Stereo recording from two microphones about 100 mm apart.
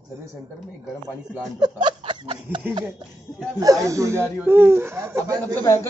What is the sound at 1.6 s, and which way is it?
Speech, 50° right (ahead or behind).